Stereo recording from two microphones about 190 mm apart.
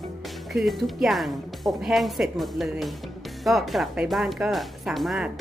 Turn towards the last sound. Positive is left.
turn(degrees=0)  # may be behind; listen again after turning